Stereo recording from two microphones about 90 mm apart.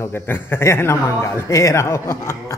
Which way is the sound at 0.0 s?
25° left (ahead or behind).